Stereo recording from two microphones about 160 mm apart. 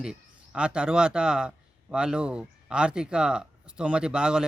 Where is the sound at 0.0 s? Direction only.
5° right (ahead or behind).